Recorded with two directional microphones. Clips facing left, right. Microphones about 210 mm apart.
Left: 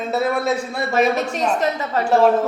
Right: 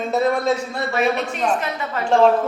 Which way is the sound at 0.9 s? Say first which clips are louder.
Left 3 dB; 40° left (ahead or behind).